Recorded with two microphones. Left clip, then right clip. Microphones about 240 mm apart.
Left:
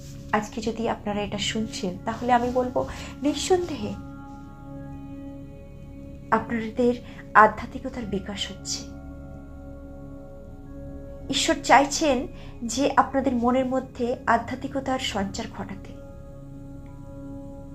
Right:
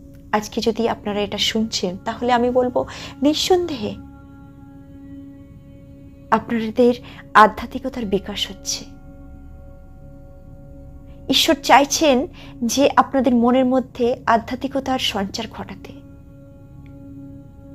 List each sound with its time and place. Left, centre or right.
0.3 s a woman's voice: right
6.3 s a woman's voice: right
11.3 s a woman's voice: right